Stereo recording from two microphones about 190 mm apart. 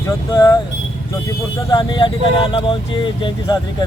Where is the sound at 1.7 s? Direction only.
25° left (ahead or behind).